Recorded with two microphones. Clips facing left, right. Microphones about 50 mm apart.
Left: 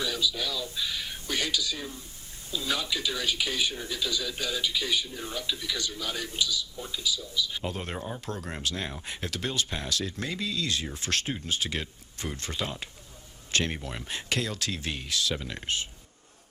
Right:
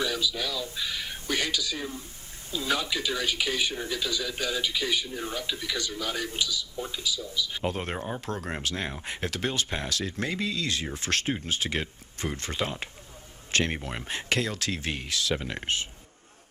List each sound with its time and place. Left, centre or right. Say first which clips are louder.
0.0 s speech: right 1 dB; right